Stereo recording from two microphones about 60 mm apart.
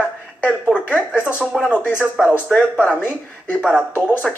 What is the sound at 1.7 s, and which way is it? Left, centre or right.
Speech, left.